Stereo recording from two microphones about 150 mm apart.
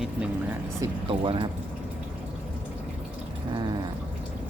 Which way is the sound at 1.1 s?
40° right (ahead or behind).